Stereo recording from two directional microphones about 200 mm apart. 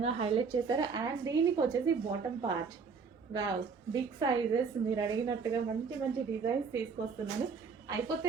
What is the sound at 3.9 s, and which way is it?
Speech, 20° right (ahead or behind).